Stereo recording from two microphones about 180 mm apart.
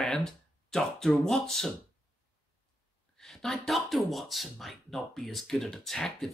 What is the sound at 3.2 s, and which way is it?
Speech, centre (ahead or behind).